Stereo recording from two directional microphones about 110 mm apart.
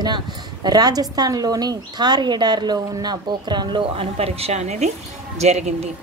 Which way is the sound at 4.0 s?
65° right (ahead or behind).